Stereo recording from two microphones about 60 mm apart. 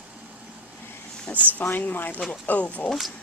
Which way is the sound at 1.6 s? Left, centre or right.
Left.